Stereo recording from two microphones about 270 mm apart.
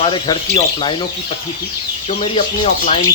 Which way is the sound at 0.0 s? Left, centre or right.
Centre.